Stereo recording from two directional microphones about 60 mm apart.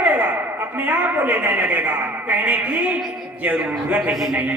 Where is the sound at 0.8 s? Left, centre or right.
Right.